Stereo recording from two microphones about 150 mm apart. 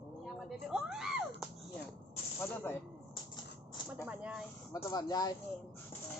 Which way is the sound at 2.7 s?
15° left (ahead or behind).